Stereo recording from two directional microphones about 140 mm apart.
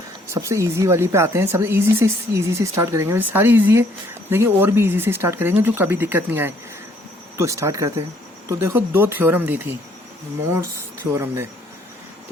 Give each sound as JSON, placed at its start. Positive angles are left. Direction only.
{"t": 0.3, "sound": "speech", "side_deg": -20}
{"t": 11.1, "sound": "speech", "side_deg": -20}